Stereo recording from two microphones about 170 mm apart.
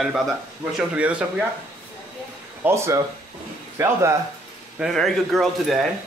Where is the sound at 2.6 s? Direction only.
15° right (ahead or behind).